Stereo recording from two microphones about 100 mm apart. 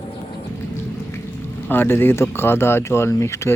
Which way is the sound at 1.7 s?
20° left (ahead or behind).